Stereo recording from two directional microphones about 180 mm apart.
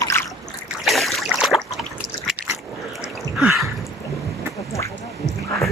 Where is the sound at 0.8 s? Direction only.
Centre (ahead or behind).